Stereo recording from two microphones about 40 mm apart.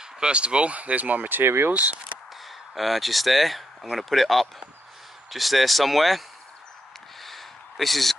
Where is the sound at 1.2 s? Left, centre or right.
Right.